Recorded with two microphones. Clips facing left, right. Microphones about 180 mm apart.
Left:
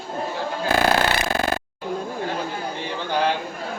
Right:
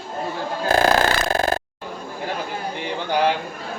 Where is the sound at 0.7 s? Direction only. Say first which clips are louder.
Right 2 dB; 40° right (ahead or behind).